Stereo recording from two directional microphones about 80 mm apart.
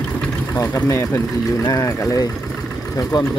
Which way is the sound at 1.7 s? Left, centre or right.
Left.